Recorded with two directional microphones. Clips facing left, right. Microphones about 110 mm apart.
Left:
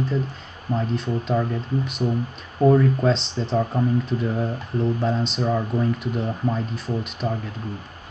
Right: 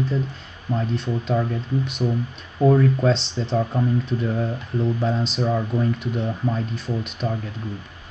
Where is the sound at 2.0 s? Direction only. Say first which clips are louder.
Even; 15° left (ahead or behind).